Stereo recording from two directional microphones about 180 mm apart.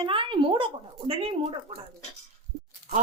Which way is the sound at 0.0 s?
30° right (ahead or behind).